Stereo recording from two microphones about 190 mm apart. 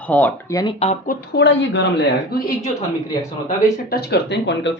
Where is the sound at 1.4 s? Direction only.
70° left (ahead or behind).